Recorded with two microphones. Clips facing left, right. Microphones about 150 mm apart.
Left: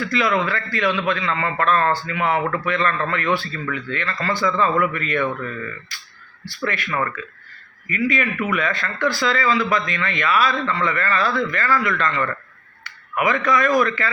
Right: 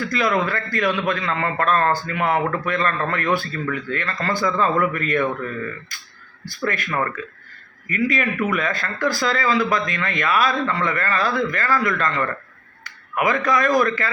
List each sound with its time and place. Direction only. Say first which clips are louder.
0.0 s a man's voice: even; 45° right (ahead or behind)